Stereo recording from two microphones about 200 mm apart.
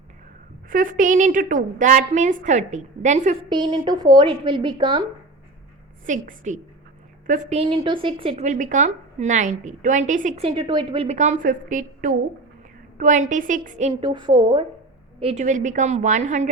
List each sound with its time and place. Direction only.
0.7 s a woman's voice: 45° right (ahead or behind)
3.5 s a woman's voice: 20° right (ahead or behind)
6.1 s a woman's voice: 40° right (ahead or behind)
7.6 s a woman's voice: 25° right (ahead or behind)
13.9 s a woman's voice: 25° right (ahead or behind)
15.2 s a woman's voice: 35° right (ahead or behind)